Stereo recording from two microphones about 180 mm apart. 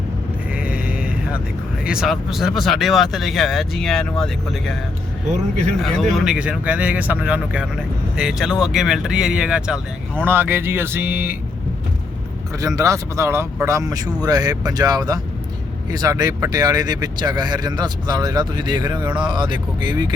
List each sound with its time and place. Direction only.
0.5 s a sound: 5° right (ahead or behind)
1.8 s speech: 5° right (ahead or behind)
5.8 s speech: centre (ahead or behind)
12.5 s speech: 20° right (ahead or behind)